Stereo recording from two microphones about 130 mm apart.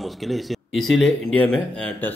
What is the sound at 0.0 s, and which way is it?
Speech, centre (ahead or behind).